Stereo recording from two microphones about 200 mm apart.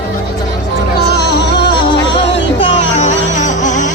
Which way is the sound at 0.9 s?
55° left (ahead or behind).